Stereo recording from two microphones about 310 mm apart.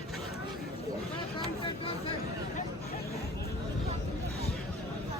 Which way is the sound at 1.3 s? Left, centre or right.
Centre.